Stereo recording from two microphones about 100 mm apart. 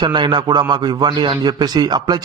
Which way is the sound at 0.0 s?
50° right (ahead or behind).